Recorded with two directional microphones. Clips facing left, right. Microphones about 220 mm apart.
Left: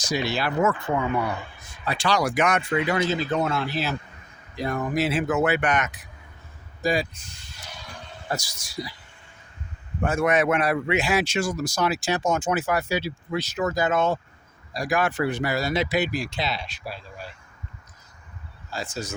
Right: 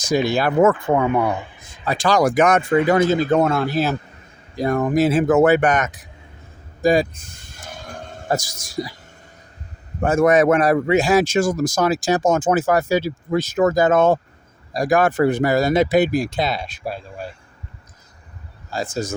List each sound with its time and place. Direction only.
0.1 s speech: 50° right (ahead or behind)
6.8 s a sound: 50° right (ahead or behind)
10.0 s speech: 45° right (ahead or behind)
18.7 s speech: 45° right (ahead or behind)